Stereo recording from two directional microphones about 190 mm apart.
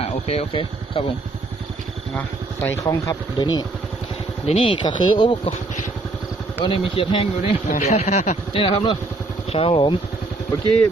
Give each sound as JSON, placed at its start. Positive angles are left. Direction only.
{"t": 0.0, "sound": "speech", "side_deg": 30}
{"t": 2.1, "sound": "speech", "side_deg": 10}
{"t": 6.6, "sound": "speech", "side_deg": 30}